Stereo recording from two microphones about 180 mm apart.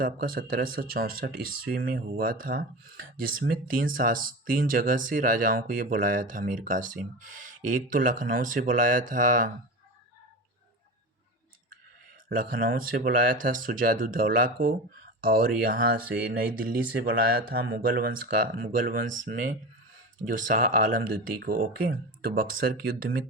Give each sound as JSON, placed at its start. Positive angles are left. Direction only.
{"t": 0.0, "sound": "speech", "side_deg": -55}
{"t": 12.4, "sound": "speech", "side_deg": -50}